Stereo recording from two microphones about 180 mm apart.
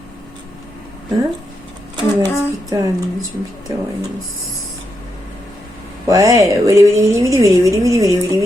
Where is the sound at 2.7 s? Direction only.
20° right (ahead or behind).